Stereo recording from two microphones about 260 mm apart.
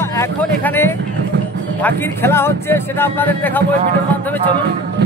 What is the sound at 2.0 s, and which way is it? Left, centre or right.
Speech, centre.